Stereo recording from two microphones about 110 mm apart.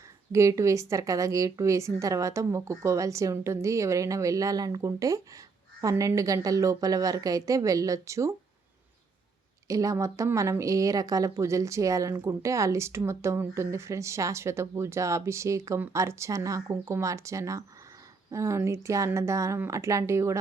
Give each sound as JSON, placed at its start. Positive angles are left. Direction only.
{"t": 0.3, "sound": "a woman's voice", "side_deg": -30}
{"t": 9.6, "sound": "a woman's voice", "side_deg": -30}